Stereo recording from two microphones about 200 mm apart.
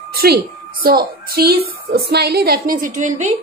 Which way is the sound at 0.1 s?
50° right (ahead or behind).